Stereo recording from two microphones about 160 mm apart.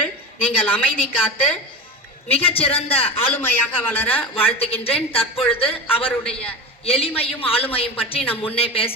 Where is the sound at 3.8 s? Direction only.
10° left (ahead or behind).